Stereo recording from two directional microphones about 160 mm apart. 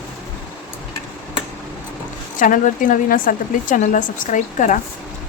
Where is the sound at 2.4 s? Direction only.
55° left (ahead or behind).